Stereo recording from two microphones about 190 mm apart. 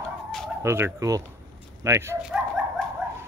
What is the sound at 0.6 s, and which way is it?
Speech, 15° right (ahead or behind).